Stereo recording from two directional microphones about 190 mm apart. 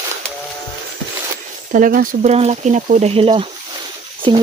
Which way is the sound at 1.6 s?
45° right (ahead or behind).